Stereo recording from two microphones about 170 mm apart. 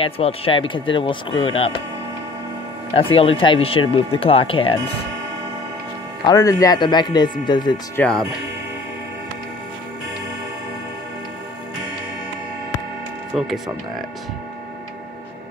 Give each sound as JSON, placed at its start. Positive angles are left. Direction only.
{"t": 0.0, "sound": "speech", "side_deg": 35}
{"t": 2.9, "sound": "speech", "side_deg": 35}
{"t": 6.2, "sound": "speech", "side_deg": 20}
{"t": 7.9, "sound": "speech", "side_deg": 5}